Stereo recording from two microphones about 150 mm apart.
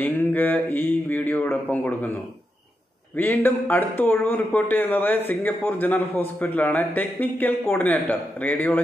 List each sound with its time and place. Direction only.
0.0 s speech: 10° left (ahead or behind)
3.2 s speech: 15° left (ahead or behind)